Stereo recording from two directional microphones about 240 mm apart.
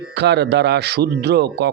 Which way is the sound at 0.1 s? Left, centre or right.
Right.